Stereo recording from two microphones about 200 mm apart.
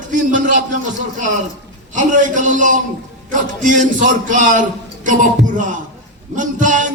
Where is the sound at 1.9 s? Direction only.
40° right (ahead or behind).